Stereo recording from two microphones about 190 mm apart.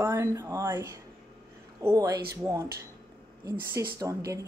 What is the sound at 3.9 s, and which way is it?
Speech, 15° right (ahead or behind).